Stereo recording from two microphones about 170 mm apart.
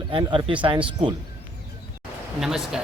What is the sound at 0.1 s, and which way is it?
Speech, 30° right (ahead or behind).